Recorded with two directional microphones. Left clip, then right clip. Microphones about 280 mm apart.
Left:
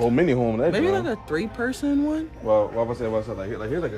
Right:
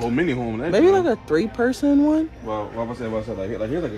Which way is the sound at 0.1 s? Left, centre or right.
Left.